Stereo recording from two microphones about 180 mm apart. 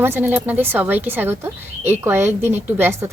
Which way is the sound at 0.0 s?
10° right (ahead or behind).